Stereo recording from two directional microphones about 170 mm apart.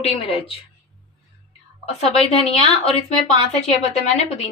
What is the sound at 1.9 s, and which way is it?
Speech, 35° left (ahead or behind).